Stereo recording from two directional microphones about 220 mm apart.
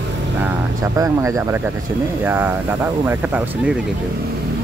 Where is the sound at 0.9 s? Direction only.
15° right (ahead or behind).